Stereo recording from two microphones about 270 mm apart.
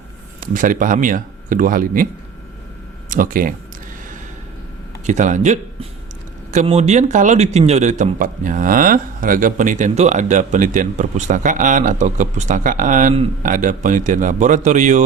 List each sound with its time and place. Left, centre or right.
0.3 s a man's voice: right
3.1 s speech: right
5.0 s a man's voice: right